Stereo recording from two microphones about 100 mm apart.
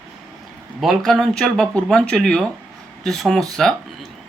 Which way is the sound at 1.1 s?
Centre (ahead or behind).